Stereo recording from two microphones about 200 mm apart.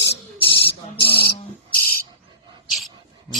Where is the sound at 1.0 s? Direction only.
50° left (ahead or behind).